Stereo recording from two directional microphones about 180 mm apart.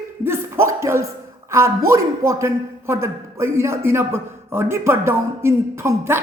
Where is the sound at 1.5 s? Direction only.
15° right (ahead or behind).